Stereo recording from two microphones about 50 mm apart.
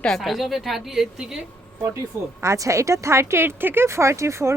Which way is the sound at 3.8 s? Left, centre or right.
Right.